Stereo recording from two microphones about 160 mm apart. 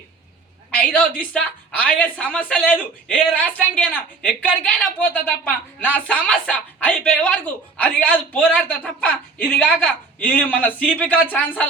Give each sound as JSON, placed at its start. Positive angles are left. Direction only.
{"t": 0.7, "sound": "a woman's voice", "side_deg": 10}